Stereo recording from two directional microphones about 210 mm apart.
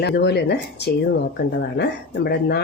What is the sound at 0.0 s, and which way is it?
Speech, 50° left (ahead or behind).